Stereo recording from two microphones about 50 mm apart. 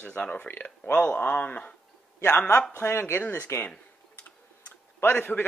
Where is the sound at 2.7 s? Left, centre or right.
Left.